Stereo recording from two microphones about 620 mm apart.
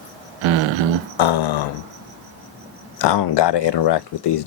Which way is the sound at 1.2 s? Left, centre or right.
Left.